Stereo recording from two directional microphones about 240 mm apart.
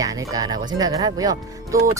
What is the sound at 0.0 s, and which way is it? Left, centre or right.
Speech, centre.